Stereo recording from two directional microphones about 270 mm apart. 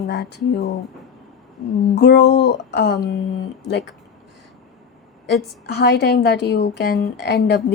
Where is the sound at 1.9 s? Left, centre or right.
Left.